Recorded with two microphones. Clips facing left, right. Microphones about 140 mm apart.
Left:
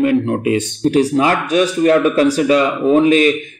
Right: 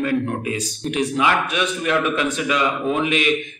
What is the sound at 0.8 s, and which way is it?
A man's voice, 35° left (ahead or behind).